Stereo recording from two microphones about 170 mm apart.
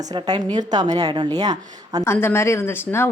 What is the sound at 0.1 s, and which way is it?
A woman's voice, 25° right (ahead or behind).